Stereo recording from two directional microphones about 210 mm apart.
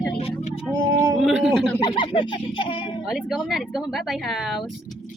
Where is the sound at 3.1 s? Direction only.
Centre (ahead or behind).